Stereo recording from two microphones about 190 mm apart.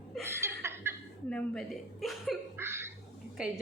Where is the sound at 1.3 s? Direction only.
5° left (ahead or behind).